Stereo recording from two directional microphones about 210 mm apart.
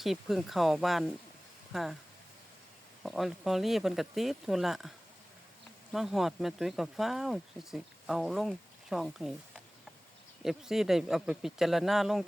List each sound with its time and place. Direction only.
0.0 s speech: centre (ahead or behind)
3.0 s speech: centre (ahead or behind)
10.4 s speech: centre (ahead or behind)